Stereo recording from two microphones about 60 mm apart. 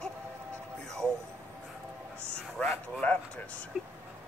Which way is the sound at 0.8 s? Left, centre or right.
Centre.